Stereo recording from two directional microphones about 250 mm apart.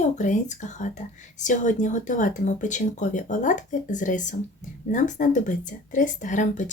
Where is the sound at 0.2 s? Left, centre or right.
Left.